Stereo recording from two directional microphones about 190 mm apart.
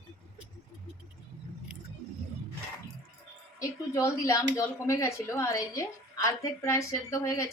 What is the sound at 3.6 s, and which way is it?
Speech, 15° left (ahead or behind).